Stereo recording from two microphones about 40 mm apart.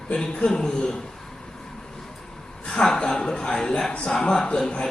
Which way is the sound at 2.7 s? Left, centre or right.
Centre.